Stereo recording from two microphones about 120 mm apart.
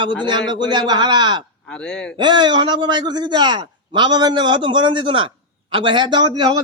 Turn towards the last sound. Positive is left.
turn(degrees=-40)  # may be behind; listen again after turning